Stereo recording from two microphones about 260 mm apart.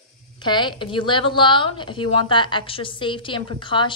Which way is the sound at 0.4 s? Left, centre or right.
Centre.